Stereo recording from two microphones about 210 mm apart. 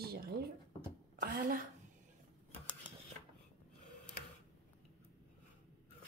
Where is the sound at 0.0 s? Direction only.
50° right (ahead or behind).